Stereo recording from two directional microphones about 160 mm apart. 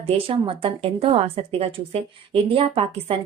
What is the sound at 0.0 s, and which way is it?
A woman's voice, 35° right (ahead or behind).